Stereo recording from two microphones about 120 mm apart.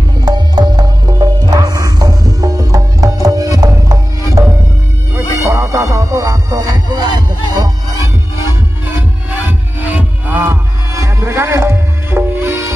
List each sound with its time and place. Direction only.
0.2 s music: 35° right (ahead or behind)
9.5 s music: 15° right (ahead or behind)